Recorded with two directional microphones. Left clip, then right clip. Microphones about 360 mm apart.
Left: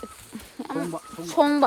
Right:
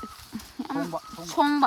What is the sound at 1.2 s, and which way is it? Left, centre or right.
Speech, centre.